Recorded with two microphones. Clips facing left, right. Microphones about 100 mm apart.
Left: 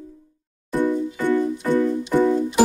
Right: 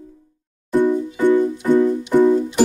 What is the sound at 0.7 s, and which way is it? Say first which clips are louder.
Music: right 4 dB; 15° right (ahead or behind).